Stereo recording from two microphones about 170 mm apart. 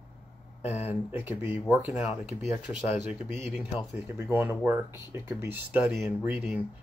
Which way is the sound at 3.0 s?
15° right (ahead or behind).